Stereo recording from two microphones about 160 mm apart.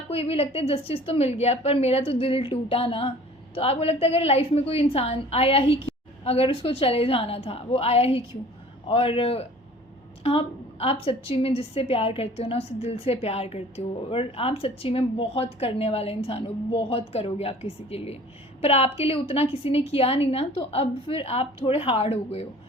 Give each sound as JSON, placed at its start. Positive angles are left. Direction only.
{"t": 0.1, "sound": "a woman's voice", "side_deg": 40}